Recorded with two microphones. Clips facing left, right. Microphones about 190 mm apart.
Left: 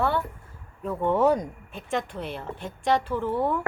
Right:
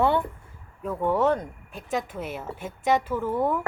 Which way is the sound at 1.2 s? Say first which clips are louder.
Left 2 dB; 10° left (ahead or behind).